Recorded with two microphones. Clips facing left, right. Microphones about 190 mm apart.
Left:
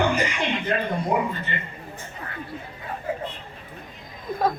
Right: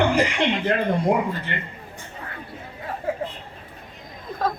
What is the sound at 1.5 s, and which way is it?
Speech, 90° right.